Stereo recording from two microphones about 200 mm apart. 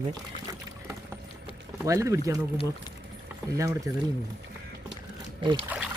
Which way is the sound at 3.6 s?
15° right (ahead or behind).